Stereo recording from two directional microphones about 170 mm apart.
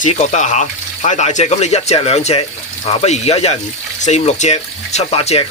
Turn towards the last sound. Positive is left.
turn(degrees=40)  # may be behind; listen again after turning